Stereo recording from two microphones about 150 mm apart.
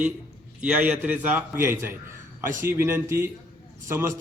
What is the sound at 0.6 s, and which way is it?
A man's voice, 10° right (ahead or behind).